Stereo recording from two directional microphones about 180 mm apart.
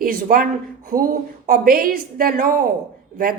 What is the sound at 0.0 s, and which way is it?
Speech, 55° right (ahead or behind).